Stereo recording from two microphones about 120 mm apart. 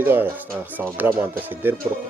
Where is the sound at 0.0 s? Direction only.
15° right (ahead or behind).